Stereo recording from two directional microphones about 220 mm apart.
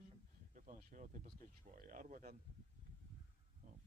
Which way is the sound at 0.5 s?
35° right (ahead or behind).